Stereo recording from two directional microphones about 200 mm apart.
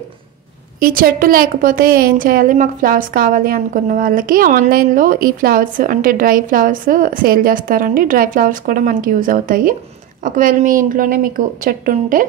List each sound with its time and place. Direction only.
0.7 s a woman's voice: 45° right (ahead or behind)